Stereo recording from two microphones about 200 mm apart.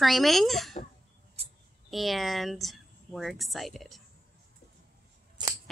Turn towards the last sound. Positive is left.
turn(degrees=-20)  # may be behind; listen again after turning